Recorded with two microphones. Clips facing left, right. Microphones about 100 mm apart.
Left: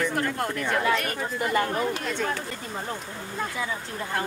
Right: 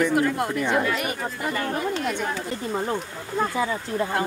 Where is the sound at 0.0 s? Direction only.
15° right (ahead or behind).